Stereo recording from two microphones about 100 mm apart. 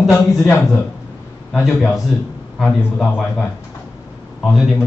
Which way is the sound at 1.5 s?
Centre (ahead or behind).